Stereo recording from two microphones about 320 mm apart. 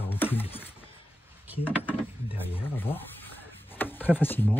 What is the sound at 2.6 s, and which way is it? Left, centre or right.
Speech, centre.